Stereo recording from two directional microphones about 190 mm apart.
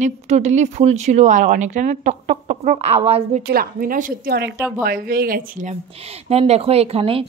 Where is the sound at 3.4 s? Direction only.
50° right (ahead or behind).